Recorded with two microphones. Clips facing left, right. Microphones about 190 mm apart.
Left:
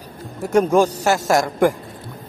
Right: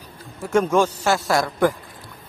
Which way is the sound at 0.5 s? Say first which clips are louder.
Left 3 dB; 40° left (ahead or behind).